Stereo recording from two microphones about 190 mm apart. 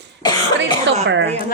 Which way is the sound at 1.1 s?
70° right (ahead or behind).